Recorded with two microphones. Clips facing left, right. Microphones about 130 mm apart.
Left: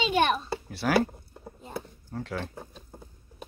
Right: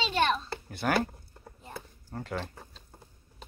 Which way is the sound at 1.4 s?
25° left (ahead or behind).